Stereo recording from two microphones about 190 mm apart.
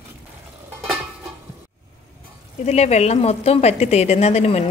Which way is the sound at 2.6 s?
35° left (ahead or behind).